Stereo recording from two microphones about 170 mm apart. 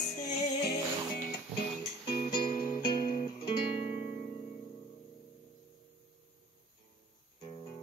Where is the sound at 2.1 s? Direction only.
30° left (ahead or behind).